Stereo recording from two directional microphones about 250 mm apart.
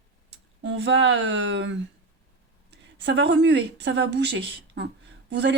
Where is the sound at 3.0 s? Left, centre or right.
Right.